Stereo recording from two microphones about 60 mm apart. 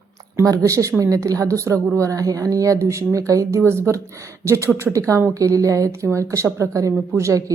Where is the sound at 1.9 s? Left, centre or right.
Right.